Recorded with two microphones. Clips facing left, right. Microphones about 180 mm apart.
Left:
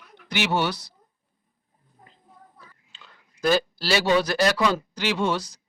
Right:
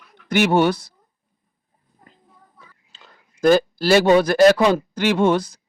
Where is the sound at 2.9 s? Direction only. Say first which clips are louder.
Right 2 dB; 40° right (ahead or behind).